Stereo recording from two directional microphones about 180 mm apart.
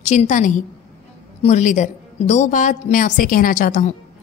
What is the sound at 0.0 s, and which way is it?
A woman's voice, 40° left (ahead or behind).